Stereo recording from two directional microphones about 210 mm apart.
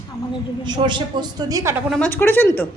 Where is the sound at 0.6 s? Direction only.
20° right (ahead or behind).